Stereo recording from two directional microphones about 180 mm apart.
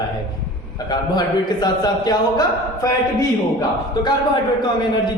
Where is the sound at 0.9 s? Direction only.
25° left (ahead or behind).